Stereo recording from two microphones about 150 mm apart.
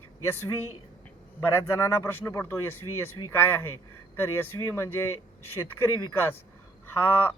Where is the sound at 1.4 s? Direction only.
15° left (ahead or behind).